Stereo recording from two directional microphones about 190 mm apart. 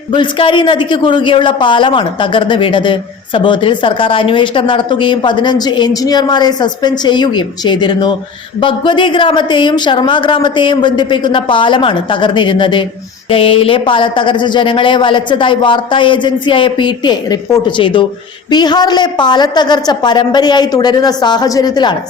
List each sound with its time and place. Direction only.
0.1 s a man's voice: 25° left (ahead or behind)